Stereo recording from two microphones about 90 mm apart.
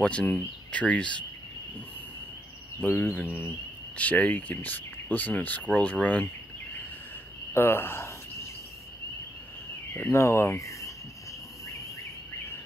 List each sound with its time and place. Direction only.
0.0 s speech: 15° left (ahead or behind)
2.8 s speech: 20° left (ahead or behind)
7.5 s speech: 25° left (ahead or behind)
10.1 s speech: 30° left (ahead or behind)